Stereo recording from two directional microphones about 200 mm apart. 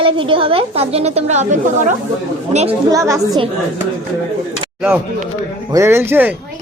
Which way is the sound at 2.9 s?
15° right (ahead or behind).